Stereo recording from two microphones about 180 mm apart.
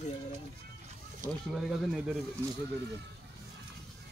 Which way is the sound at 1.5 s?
Centre (ahead or behind).